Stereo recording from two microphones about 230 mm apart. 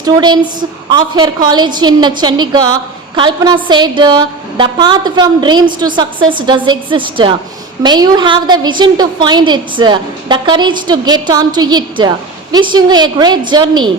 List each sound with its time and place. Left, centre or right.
0.0 s a woman's voice: centre